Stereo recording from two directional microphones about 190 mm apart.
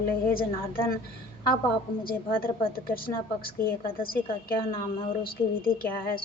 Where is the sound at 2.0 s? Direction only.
50° left (ahead or behind).